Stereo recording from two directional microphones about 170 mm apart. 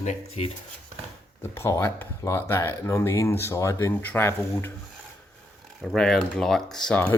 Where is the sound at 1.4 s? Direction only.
15° left (ahead or behind).